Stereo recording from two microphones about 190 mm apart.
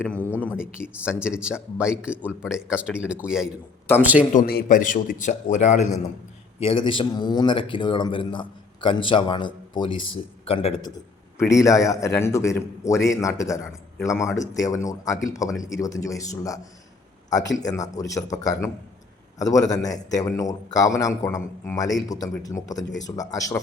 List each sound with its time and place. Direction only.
0.0 s a man's voice: 10° left (ahead or behind)
1.2 s a man's voice: 5° right (ahead or behind)
4.4 s a man's voice: 50° left (ahead or behind)
6.6 s a man's voice: 30° left (ahead or behind)
11.3 s a man's voice: 15° left (ahead or behind)
17.9 s a man's voice: 20° left (ahead or behind)